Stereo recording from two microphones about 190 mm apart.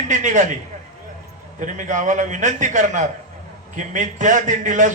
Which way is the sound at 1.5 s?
40° right (ahead or behind).